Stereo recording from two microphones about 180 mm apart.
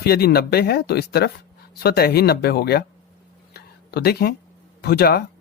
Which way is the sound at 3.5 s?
60° left (ahead or behind).